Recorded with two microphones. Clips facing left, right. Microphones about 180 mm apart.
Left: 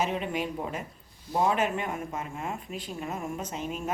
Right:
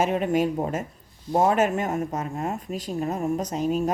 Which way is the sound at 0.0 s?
45° right (ahead or behind).